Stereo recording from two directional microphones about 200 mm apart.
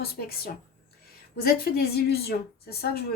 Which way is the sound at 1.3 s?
50° left (ahead or behind).